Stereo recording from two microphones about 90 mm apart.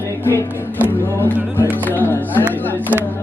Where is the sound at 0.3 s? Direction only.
25° left (ahead or behind).